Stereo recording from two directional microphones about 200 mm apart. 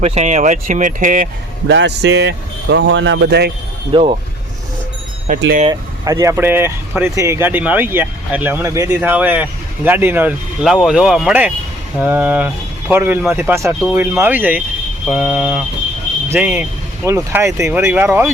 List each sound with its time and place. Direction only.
0.0 s speech: 35° right (ahead or behind)
1.6 s speech: 65° right (ahead or behind)
3.9 s speech: 25° right (ahead or behind)
5.6 s speech: 15° right (ahead or behind)
15.0 s a sound: 5° right (ahead or behind)
16.3 s speech: 10° right (ahead or behind)